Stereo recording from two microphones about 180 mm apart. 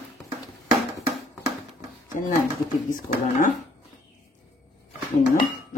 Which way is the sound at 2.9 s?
45° left (ahead or behind).